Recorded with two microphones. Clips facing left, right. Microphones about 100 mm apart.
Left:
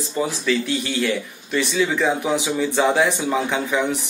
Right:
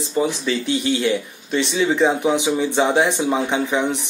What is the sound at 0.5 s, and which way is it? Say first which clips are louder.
Speech: right 2 dB; 25° right (ahead or behind).